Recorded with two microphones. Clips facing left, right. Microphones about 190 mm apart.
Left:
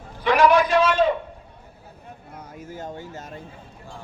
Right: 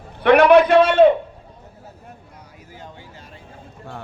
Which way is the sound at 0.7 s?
65° right (ahead or behind).